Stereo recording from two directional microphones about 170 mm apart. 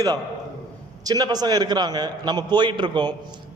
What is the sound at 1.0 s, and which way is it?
A man's voice, 20° right (ahead or behind).